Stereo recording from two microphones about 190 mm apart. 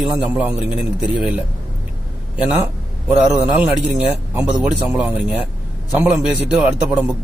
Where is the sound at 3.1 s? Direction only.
5° right (ahead or behind).